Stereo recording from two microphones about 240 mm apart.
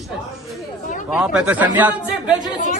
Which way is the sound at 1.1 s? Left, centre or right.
Centre.